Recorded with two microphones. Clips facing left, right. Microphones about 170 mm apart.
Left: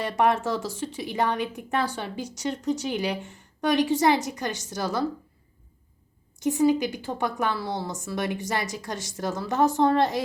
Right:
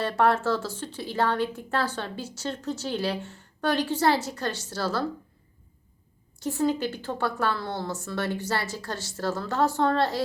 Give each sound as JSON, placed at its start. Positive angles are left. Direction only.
{"t": 0.0, "sound": "a woman's voice", "side_deg": 15}
{"t": 6.4, "sound": "a woman's voice", "side_deg": 15}